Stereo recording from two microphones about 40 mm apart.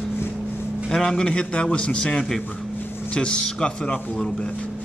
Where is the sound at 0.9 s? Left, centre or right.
Centre.